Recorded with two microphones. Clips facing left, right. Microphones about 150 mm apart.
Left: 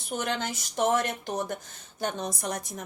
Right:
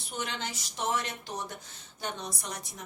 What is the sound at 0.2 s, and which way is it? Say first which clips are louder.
A woman's voice: left 4 dB; 50° left (ahead or behind).